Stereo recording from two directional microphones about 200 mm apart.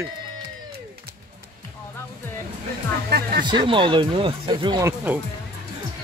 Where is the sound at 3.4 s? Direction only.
25° right (ahead or behind).